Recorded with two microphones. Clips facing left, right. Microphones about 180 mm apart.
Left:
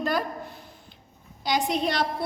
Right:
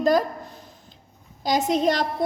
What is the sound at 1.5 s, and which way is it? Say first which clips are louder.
Speech: right 5 dB; 45° right (ahead or behind).